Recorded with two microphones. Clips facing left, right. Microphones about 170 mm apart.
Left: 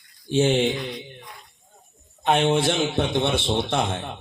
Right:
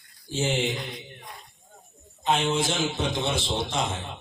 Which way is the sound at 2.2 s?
60° left (ahead or behind).